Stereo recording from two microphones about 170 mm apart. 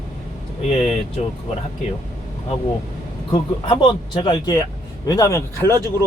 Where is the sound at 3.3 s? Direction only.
25° left (ahead or behind).